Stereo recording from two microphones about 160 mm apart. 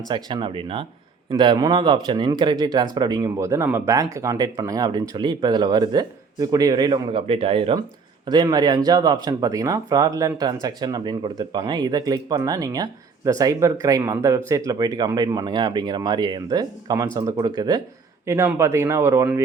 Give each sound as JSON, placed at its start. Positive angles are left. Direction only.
{"t": 0.1, "sound": "a man's voice", "side_deg": -30}